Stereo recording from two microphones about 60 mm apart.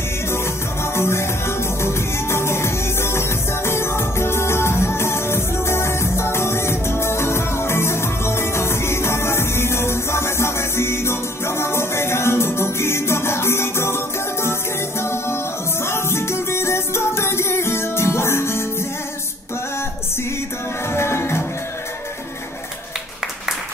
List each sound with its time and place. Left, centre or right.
0.9 s music: left
20.9 s music: left